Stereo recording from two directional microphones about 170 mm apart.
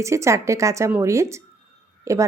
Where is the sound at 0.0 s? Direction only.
15° right (ahead or behind).